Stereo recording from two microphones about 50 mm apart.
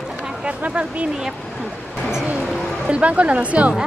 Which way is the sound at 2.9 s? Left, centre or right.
Right.